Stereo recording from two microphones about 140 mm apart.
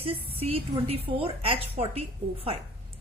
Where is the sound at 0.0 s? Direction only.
45° right (ahead or behind).